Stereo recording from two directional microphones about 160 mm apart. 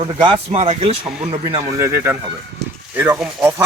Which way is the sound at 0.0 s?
30° right (ahead or behind).